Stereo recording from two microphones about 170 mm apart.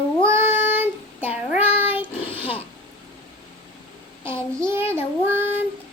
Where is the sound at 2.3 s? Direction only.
35° left (ahead or behind).